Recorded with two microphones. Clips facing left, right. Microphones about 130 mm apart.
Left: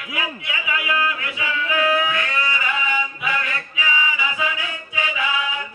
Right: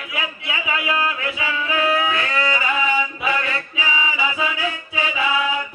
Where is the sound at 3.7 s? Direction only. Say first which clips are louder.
Left 2 dB; 30° right (ahead or behind).